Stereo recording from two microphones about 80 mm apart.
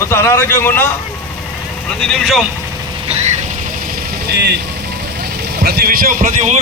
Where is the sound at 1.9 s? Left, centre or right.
Centre.